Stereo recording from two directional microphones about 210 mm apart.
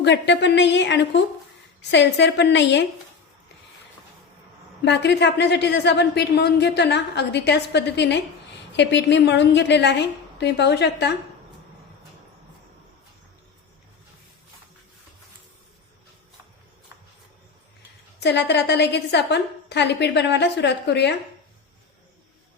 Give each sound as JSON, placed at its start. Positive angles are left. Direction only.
{"t": 0.0, "sound": "a woman's voice", "side_deg": 55}
{"t": 4.9, "sound": "a woman's voice", "side_deg": 55}
{"t": 18.2, "sound": "a woman's voice", "side_deg": 55}